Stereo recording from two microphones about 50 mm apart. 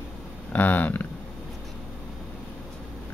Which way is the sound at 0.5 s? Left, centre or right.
Left.